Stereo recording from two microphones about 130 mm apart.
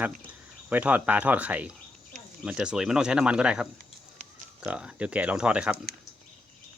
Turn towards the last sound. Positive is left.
turn(degrees=-10)  # may be behind; listen again after turning